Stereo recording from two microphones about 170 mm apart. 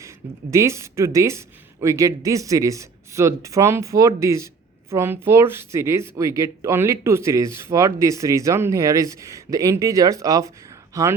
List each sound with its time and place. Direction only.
0.5 s speech: 15° right (ahead or behind)